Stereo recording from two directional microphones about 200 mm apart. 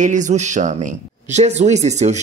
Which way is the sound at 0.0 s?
40° right (ahead or behind).